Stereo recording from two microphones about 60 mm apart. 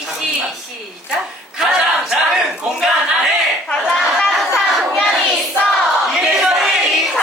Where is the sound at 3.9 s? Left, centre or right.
Centre.